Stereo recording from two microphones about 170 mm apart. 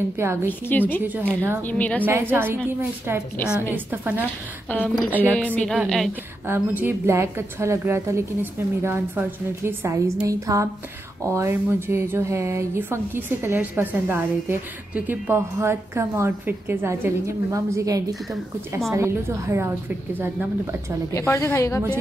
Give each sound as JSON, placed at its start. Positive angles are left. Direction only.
{"t": 0.2, "sound": "speech", "side_deg": -15}
{"t": 0.5, "sound": "a woman's voice", "side_deg": 10}
{"t": 2.0, "sound": "speech", "side_deg": -10}
{"t": 4.6, "sound": "a woman's voice", "side_deg": 10}
{"t": 6.4, "sound": "speech", "side_deg": -10}
{"t": 21.1, "sound": "a woman's voice", "side_deg": 15}